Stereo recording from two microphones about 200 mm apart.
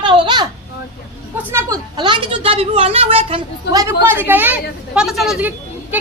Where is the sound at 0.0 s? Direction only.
25° right (ahead or behind).